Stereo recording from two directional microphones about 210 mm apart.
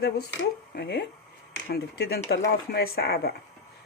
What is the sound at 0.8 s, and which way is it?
Speech, 50° left (ahead or behind).